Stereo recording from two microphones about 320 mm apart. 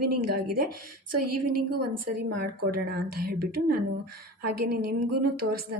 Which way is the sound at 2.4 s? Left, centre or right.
Right.